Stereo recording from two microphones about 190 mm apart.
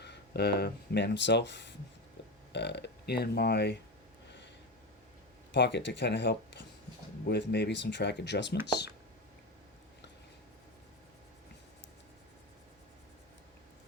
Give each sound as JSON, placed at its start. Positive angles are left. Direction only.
{"t": 0.0, "sound": "speech", "side_deg": 60}
{"t": 5.5, "sound": "speech", "side_deg": 65}